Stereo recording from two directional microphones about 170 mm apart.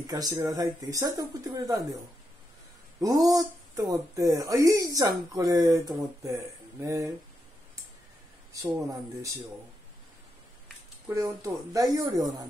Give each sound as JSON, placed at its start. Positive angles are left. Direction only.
{"t": 0.0, "sound": "speech", "side_deg": -20}
{"t": 3.0, "sound": "speech", "side_deg": -20}
{"t": 8.8, "sound": "speech", "side_deg": -20}
{"t": 11.1, "sound": "speech", "side_deg": -20}